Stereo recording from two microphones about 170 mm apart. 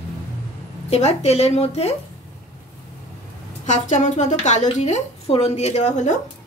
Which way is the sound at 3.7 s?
45° left (ahead or behind).